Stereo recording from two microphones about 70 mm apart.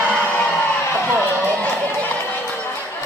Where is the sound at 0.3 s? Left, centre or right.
Centre.